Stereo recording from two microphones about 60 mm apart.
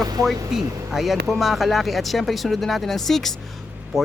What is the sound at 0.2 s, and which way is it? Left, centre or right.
Speech, right.